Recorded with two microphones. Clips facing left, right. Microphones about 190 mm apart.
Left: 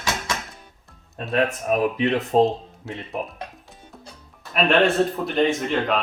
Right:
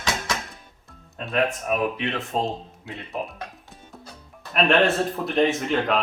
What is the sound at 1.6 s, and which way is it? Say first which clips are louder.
Speech: left 4 dB; 40° left (ahead or behind).